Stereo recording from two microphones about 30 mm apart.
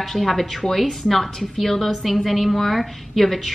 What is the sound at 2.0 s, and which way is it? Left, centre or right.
A woman's voice, centre.